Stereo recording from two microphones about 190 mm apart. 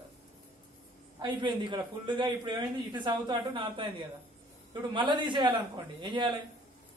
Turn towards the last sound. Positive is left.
turn(degrees=-25)  # may be behind; listen again after turning